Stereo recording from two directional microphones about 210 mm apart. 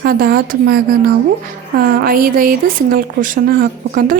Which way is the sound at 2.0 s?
45° right (ahead or behind).